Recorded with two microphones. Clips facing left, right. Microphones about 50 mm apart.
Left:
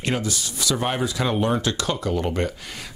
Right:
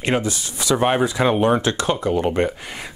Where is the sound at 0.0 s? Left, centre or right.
Right.